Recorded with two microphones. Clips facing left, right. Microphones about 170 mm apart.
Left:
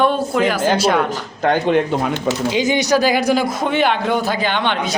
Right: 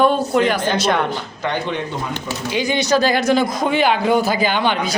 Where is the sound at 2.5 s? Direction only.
15° left (ahead or behind).